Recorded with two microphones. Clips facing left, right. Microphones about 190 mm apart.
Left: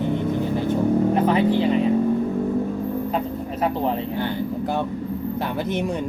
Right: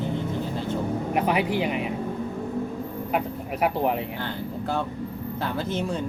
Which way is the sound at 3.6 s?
15° right (ahead or behind).